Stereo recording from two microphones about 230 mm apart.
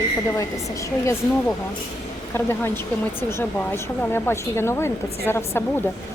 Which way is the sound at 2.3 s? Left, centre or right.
Centre.